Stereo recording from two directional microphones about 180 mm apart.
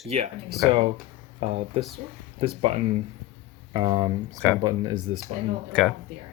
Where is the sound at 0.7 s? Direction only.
30° right (ahead or behind).